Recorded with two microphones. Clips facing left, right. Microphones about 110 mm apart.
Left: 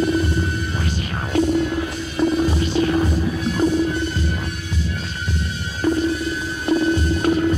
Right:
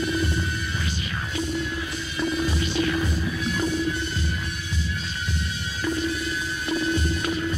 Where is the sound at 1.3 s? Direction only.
55° left (ahead or behind).